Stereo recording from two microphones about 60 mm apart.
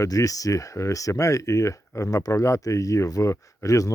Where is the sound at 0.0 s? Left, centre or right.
Left.